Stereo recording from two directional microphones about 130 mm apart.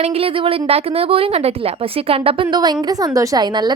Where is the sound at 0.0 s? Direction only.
50° right (ahead or behind).